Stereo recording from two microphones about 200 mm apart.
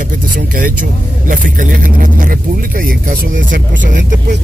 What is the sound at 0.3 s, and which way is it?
Vehicle, 45° right (ahead or behind).